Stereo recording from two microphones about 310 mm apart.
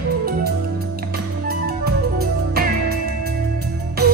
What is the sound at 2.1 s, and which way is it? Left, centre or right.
Music, right.